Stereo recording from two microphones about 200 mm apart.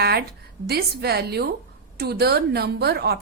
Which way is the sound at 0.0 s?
50° right (ahead or behind).